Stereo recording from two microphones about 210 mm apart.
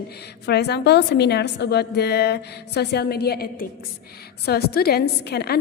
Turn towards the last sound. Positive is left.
turn(degrees=50)  # may be behind; listen again after turning